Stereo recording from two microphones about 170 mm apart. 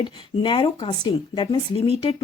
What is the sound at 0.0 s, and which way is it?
Speech, 30° left (ahead or behind).